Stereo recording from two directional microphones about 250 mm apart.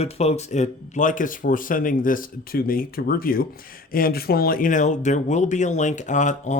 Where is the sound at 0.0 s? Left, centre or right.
Left.